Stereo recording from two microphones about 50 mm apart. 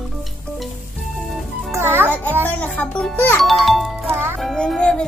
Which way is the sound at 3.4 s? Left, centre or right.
Centre.